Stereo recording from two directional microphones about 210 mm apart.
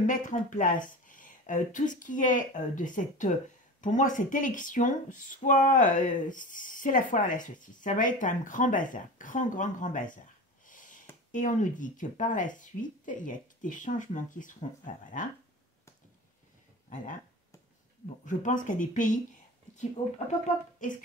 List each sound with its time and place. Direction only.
0.0 s speech: 35° left (ahead or behind)
10.7 s a sound: 40° left (ahead or behind)
11.3 s speech: 35° left (ahead or behind)
16.9 s speech: 40° left (ahead or behind)